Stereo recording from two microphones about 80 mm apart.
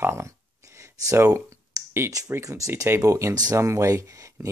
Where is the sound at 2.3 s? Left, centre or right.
Right.